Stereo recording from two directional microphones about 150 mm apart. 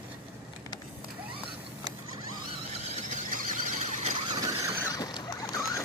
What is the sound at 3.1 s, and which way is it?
Squeal, 60° right (ahead or behind).